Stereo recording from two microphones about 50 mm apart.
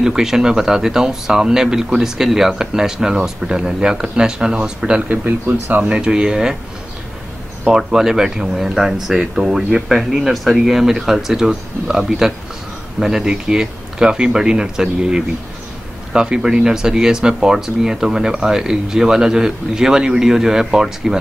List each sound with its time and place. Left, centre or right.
0.0 s speech: centre
5.1 s speech: right
5.9 s speech: right
7.6 s speech: centre